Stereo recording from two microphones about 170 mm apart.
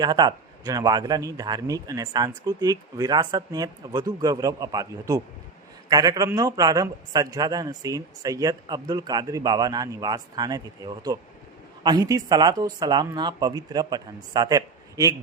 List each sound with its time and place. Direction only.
0.0 s a man's voice: 25° right (ahead or behind)